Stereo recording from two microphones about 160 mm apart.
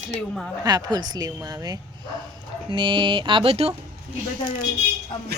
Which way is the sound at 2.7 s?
30° right (ahead or behind).